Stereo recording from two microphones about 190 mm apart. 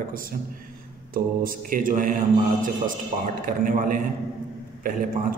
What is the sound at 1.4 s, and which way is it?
Speech, 45° right (ahead or behind).